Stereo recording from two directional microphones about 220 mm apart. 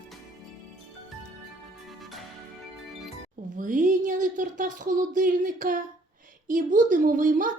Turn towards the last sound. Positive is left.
turn(degrees=-35)  # may be behind; listen again after turning